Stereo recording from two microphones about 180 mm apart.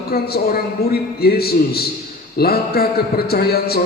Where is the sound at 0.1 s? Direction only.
60° left (ahead or behind).